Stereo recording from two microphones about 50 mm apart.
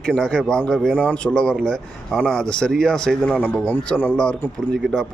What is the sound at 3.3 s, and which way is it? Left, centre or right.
Speech, left.